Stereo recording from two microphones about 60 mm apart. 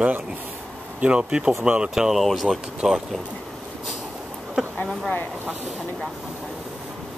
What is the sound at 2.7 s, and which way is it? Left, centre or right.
Speech, centre.